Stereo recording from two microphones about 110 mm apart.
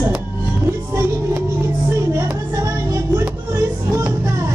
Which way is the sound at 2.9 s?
25° right (ahead or behind).